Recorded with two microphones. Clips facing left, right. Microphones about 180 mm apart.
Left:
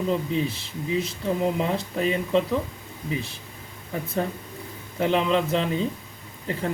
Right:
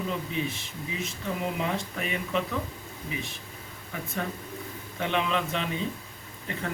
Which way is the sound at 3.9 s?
35° left (ahead or behind).